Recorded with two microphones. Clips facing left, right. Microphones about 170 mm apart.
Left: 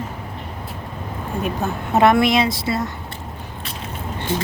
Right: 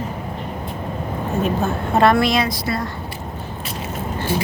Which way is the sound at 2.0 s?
20° left (ahead or behind).